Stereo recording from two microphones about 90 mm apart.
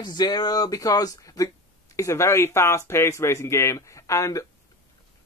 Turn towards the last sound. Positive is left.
turn(degrees=35)  # may be behind; listen again after turning